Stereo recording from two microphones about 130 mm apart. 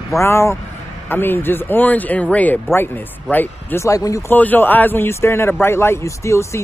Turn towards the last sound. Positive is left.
turn(degrees=20)  # may be behind; listen again after turning